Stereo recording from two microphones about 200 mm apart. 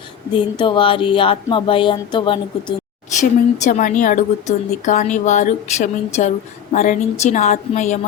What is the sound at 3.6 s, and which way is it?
A woman's voice, 40° left (ahead or behind).